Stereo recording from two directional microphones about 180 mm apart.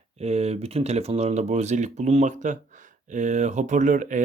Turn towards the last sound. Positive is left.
turn(degrees=-45)  # may be behind; listen again after turning